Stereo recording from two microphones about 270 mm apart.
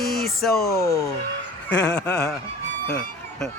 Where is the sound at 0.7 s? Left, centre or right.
Centre.